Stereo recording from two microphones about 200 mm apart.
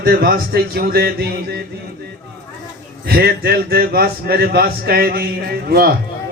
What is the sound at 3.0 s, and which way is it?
A man's voice, 50° right (ahead or behind).